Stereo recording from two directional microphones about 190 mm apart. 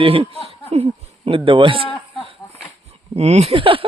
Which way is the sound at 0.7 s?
35° right (ahead or behind).